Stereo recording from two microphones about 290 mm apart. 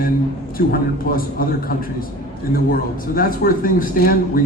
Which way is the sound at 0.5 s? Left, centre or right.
Left.